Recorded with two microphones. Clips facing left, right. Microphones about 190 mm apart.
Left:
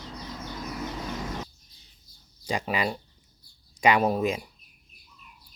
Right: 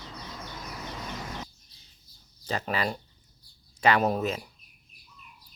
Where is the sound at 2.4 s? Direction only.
10° left (ahead or behind).